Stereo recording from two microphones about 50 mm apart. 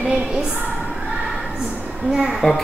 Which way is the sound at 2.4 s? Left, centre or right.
Centre.